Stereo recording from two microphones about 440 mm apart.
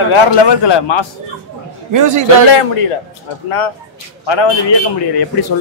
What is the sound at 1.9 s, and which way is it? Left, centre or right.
Speech, right.